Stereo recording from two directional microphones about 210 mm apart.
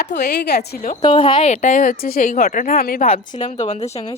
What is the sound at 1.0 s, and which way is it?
Speech, 25° left (ahead or behind).